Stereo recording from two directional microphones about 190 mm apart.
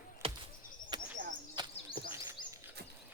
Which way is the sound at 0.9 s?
25° right (ahead or behind).